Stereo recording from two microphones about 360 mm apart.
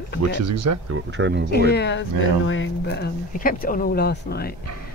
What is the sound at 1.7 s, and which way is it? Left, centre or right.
Speech, left.